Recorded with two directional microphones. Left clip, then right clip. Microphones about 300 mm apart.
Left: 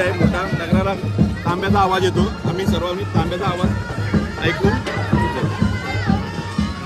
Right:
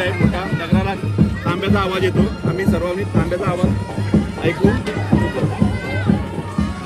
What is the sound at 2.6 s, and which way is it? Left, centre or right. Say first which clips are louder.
Speech: right 2 dB; centre.